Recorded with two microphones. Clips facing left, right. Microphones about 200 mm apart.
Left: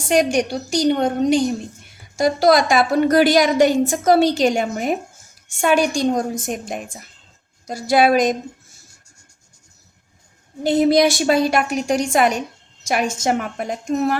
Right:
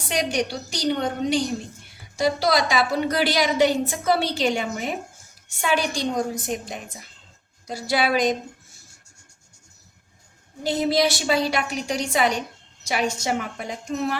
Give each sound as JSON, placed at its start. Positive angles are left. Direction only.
{"t": 0.1, "sound": "a woman's voice", "side_deg": 50}
{"t": 10.7, "sound": "a woman's voice", "side_deg": 50}